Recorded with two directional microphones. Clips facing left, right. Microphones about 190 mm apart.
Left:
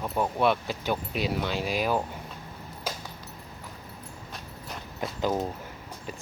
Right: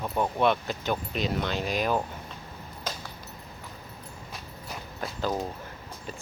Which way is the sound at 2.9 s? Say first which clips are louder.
Left 1 dB; 10° left (ahead or behind).